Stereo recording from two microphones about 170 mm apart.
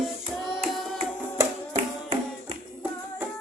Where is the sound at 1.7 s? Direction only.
35° right (ahead or behind).